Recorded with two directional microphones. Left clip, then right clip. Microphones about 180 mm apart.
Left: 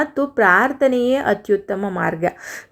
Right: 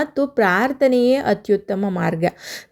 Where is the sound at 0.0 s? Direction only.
35° right (ahead or behind).